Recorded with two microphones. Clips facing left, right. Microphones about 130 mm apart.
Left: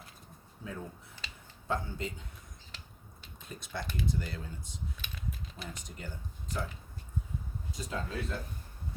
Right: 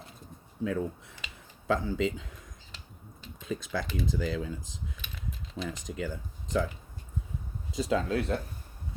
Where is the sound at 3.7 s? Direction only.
90° right.